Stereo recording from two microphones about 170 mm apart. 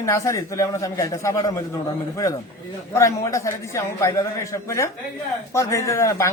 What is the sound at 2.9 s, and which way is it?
A man's voice, 15° left (ahead or behind).